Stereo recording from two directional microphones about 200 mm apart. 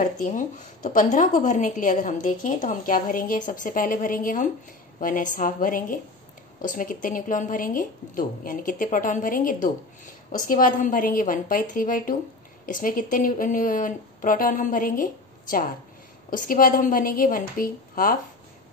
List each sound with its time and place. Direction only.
0.0 s a woman's voice: 40° left (ahead or behind)